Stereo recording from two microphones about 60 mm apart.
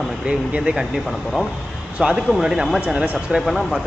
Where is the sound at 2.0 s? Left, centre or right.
Centre.